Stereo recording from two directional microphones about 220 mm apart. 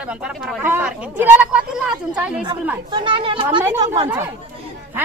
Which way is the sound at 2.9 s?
20° right (ahead or behind).